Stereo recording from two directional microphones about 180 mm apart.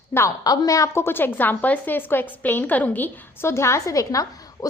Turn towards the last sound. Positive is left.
turn(degrees=20)  # may be behind; listen again after turning